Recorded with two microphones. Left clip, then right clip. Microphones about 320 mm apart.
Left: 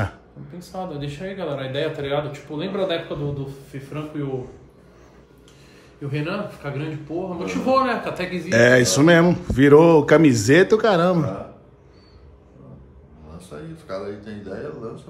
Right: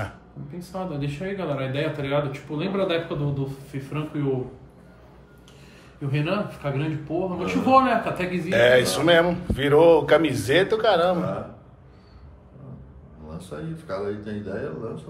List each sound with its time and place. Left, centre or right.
0.6 s speech: centre
6.0 s speech: centre
8.5 s a sound: left
13.4 s speech: centre